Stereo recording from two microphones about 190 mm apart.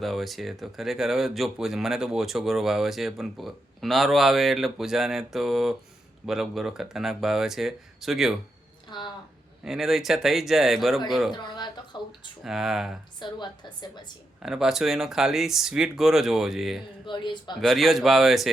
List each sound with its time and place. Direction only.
0.0 s speech: centre (ahead or behind)
8.9 s speech: 25° left (ahead or behind)
9.6 s speech: centre (ahead or behind)
11.3 s a sound: 25° left (ahead or behind)
11.9 s speech: 20° left (ahead or behind)
12.5 s speech: centre (ahead or behind)
13.1 s a woman's voice: 25° left (ahead or behind)
14.4 s speech: centre (ahead or behind)
17.1 s a man's voice: 25° left (ahead or behind)
17.6 s speech: centre (ahead or behind)